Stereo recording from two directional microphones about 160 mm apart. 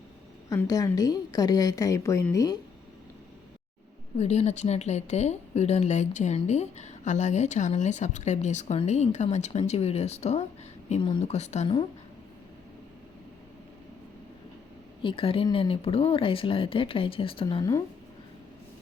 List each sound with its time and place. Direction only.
0.5 s a woman's voice: 20° left (ahead or behind)
4.2 s a woman's voice: 45° left (ahead or behind)
15.0 s speech: 35° left (ahead or behind)